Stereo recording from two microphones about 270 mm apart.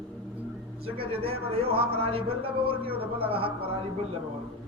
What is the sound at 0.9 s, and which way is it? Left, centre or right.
Speech, right.